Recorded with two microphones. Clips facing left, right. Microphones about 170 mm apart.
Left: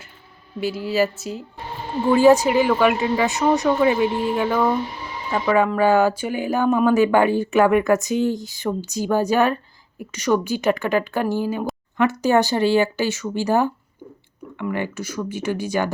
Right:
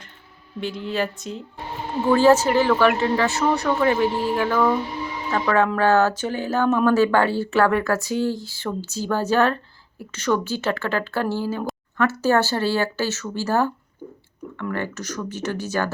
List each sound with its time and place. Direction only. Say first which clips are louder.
0.6 s speech: left 5 dB; 5° left (ahead or behind)